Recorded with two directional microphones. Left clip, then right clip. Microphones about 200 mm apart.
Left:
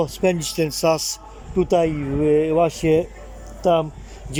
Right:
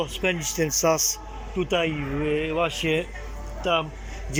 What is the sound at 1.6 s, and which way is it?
Speech, 20° left (ahead or behind).